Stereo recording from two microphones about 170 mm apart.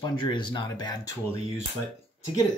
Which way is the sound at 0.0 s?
25° left (ahead or behind).